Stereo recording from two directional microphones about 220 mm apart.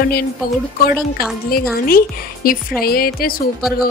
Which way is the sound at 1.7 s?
40° left (ahead or behind).